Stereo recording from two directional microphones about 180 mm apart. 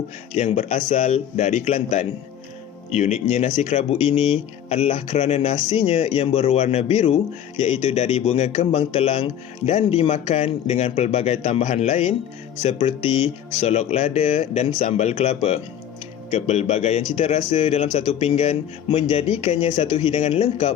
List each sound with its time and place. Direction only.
0.3 s speech: 40° left (ahead or behind)